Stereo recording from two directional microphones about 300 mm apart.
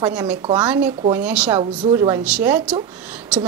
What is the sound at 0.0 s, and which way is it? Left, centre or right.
A woman's voice, centre.